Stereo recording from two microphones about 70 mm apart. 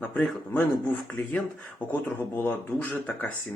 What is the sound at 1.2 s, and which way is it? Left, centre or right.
Speech, left.